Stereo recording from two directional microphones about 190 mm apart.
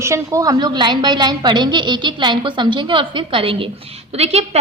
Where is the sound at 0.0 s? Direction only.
15° right (ahead or behind).